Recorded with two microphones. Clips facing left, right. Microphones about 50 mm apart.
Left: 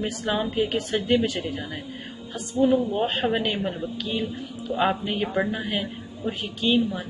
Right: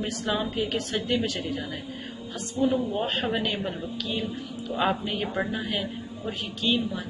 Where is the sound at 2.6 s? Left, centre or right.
Centre.